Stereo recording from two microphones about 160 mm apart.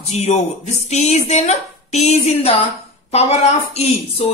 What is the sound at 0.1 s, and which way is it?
A woman's voice, 45° left (ahead or behind).